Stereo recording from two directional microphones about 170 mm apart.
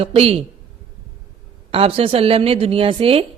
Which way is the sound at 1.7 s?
35° right (ahead or behind).